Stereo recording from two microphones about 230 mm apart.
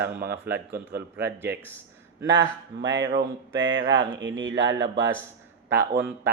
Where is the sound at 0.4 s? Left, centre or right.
Centre.